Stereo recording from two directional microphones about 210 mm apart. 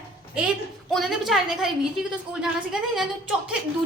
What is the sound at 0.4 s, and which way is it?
A woman's voice, centre (ahead or behind).